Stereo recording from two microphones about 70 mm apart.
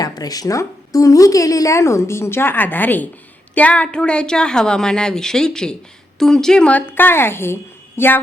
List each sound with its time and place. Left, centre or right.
0.0 s a woman's voice: left; by 6.7 s centre
6.7 s a woman's voice: left